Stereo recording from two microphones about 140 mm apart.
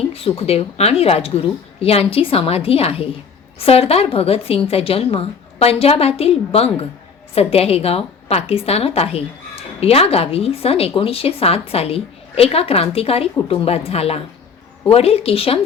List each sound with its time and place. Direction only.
0.1 s a woman's voice: 45° left (ahead or behind)